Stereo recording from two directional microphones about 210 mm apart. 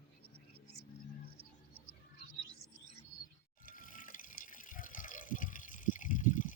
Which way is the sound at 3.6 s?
40° left (ahead or behind).